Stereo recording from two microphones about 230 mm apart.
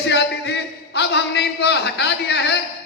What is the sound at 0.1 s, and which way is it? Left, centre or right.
A man's voice, left.